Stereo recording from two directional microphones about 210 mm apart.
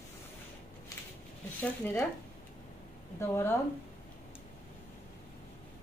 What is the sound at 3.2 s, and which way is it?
Speech, 10° left (ahead or behind).